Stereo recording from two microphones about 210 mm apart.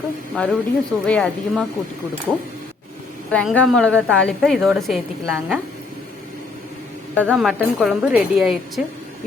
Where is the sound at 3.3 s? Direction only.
5° left (ahead or behind).